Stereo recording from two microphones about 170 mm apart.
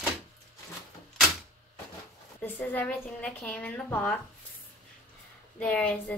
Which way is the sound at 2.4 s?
10° left (ahead or behind).